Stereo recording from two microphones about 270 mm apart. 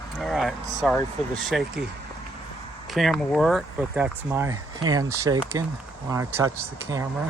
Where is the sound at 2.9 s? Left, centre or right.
Centre.